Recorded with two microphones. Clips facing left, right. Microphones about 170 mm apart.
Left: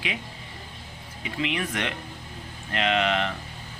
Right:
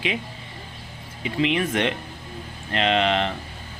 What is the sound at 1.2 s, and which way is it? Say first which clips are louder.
Speech: right 6 dB; 25° right (ahead or behind).